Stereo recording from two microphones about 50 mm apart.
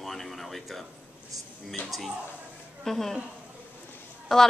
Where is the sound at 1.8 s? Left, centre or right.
Left.